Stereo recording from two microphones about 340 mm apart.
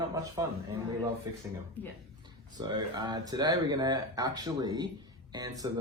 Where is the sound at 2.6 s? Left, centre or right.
Centre.